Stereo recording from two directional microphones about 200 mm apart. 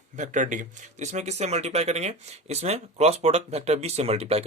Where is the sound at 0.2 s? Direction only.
40° right (ahead or behind).